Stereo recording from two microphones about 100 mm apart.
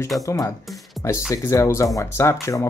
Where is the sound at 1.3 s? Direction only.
30° left (ahead or behind).